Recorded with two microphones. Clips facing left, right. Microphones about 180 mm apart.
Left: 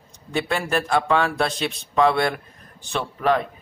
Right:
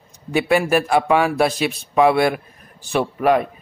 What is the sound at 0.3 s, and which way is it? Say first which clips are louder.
Speech: right 7 dB; 10° right (ahead or behind).